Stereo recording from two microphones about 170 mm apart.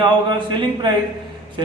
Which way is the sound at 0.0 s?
25° right (ahead or behind).